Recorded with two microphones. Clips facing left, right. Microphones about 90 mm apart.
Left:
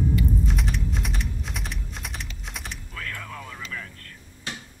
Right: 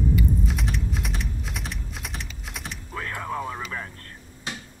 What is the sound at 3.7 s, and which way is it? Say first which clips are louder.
Vehicle: right 3 dB; 35° right (ahead or behind).